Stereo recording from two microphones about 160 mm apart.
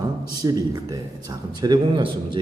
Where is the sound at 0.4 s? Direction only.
20° right (ahead or behind).